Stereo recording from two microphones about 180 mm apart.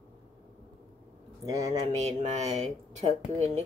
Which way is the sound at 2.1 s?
40° right (ahead or behind).